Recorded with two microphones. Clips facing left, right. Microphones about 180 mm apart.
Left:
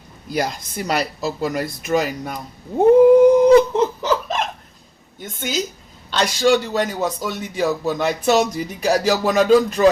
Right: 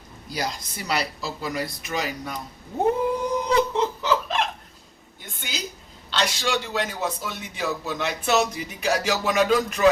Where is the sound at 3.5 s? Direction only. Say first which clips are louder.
Left 9 dB; 45° left (ahead or behind).